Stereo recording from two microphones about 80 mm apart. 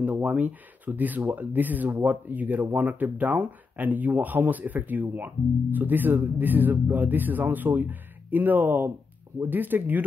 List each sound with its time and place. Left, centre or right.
0.0 s speech: centre